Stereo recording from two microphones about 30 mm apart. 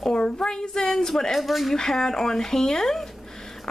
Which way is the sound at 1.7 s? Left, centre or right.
Left.